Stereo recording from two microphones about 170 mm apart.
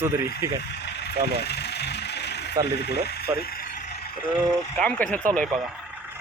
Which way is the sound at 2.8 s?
75° left (ahead or behind).